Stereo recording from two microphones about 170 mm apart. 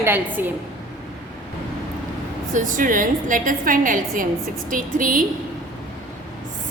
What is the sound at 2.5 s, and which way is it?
A woman's voice, 50° right (ahead or behind).